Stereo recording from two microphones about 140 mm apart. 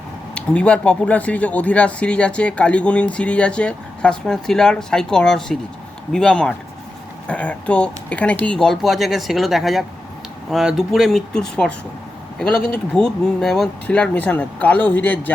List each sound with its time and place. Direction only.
0.3 s speech: 10° left (ahead or behind)